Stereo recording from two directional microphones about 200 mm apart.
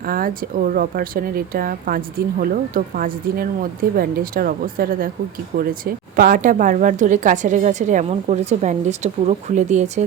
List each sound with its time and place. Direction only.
0.0 s a woman's voice: 45° right (ahead or behind)